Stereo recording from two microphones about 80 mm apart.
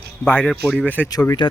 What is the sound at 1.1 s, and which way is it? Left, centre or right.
Speech, left.